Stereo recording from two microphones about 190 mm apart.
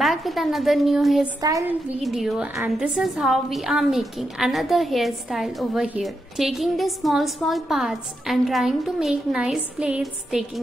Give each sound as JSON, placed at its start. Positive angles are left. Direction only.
{"t": 0.0, "sound": "a woman's voice", "side_deg": 0}
{"t": 1.4, "sound": "speech", "side_deg": -15}
{"t": 2.0, "sound": "a woman's voice", "side_deg": 0}